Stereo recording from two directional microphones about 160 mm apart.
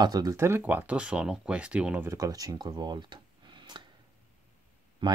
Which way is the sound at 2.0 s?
20° right (ahead or behind).